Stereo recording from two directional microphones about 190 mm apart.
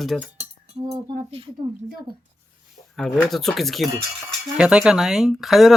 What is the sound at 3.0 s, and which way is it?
Speech, centre (ahead or behind).